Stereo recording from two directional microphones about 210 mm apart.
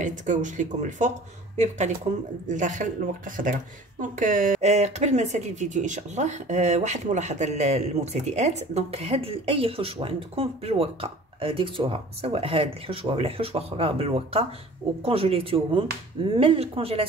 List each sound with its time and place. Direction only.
0.0 s speech: 35° right (ahead or behind)